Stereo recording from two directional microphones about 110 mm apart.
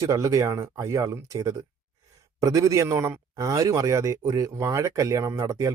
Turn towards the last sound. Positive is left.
turn(degrees=-30)  # may be behind; listen again after turning